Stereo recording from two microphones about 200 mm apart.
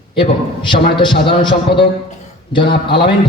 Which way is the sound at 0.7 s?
25° left (ahead or behind).